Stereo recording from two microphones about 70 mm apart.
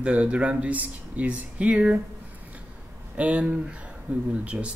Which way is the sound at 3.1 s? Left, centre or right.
Centre.